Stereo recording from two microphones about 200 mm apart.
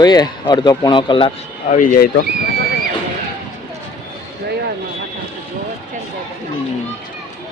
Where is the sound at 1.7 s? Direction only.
40° left (ahead or behind).